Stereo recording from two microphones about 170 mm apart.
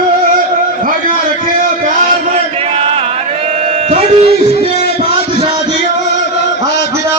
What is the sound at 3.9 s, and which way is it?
Music, 35° right (ahead or behind).